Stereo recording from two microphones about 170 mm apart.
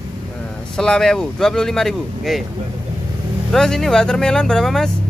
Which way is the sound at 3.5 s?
5° left (ahead or behind).